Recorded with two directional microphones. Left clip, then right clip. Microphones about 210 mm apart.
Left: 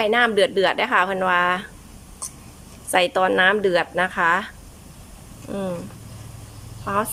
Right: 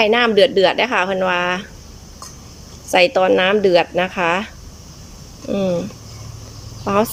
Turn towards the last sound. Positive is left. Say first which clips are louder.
# right 6 dB
turn(degrees=-15)  # may be behind; listen again after turning